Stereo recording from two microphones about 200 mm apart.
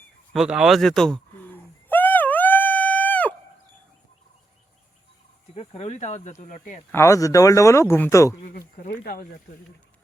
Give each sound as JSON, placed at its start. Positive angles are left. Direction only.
{"t": 0.3, "sound": "a sound", "side_deg": -5}
{"t": 5.5, "sound": "speech", "side_deg": 30}
{"t": 6.9, "sound": "speech", "side_deg": 15}
{"t": 8.4, "sound": "speech", "side_deg": 45}